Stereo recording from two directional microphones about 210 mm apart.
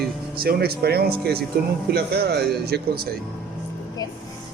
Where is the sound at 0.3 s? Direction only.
45° right (ahead or behind).